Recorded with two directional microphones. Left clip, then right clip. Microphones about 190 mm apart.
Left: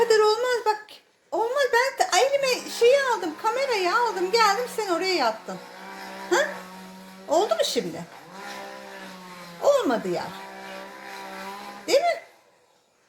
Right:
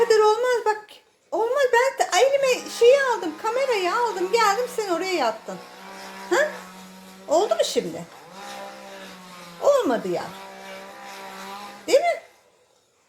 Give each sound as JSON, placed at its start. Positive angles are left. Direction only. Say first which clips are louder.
{"t": 0.0, "sound": "a sound", "louder": "right 2 dB", "side_deg": -5}
{"t": 2.8, "sound": "a woman's voice", "louder": "right 3 dB", "side_deg": -5}
{"t": 7.3, "sound": "a woman's voice", "louder": "right 2 dB", "side_deg": 0}
{"t": 9.6, "sound": "speech", "louder": "right 2 dB", "side_deg": 0}
{"t": 11.9, "sound": "speech", "louder": "right 2 dB", "side_deg": 0}